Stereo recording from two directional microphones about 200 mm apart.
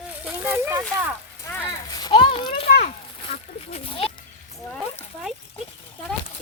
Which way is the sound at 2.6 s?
50° left (ahead or behind).